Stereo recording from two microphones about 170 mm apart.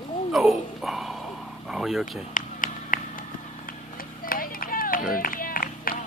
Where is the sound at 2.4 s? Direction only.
50° left (ahead or behind).